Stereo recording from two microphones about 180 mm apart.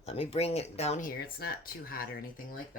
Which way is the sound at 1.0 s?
55° left (ahead or behind).